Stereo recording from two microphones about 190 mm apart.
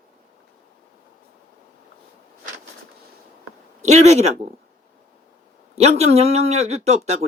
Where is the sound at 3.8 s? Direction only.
35° right (ahead or behind).